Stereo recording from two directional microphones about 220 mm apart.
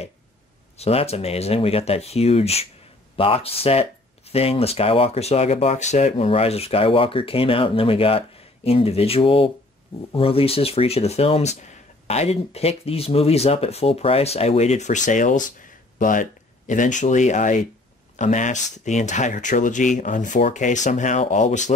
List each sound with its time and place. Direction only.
0.7 s speech: 25° left (ahead or behind)